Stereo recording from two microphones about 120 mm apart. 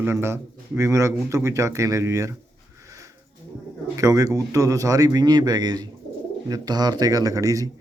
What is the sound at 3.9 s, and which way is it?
A man's voice, 30° right (ahead or behind).